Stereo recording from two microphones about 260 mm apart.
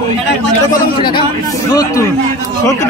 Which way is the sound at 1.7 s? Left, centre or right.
Centre.